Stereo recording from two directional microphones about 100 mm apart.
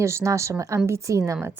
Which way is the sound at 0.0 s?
30° right (ahead or behind).